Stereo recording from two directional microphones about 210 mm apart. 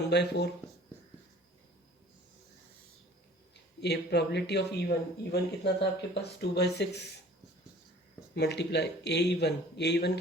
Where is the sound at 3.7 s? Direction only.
50° left (ahead or behind).